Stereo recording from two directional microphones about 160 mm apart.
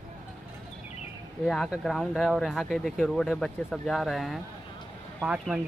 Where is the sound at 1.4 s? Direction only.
5° left (ahead or behind).